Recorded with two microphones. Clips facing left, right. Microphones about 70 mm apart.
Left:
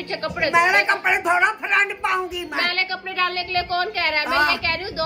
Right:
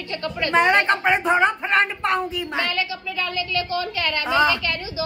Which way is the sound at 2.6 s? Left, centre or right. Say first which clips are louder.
Left 1 dB; left.